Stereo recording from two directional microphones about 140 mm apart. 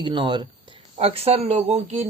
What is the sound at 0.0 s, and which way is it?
Speech, 35° right (ahead or behind).